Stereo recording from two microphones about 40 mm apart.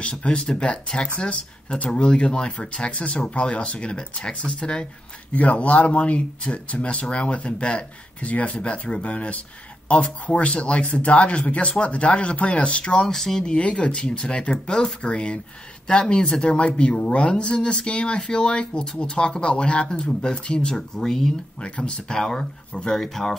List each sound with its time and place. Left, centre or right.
0.0 s speech: left
5.3 s speech: left
13.1 s speech: centre
13.5 s speech: left
20.7 s speech: centre
21.5 s speech: left
22.1 s speech: centre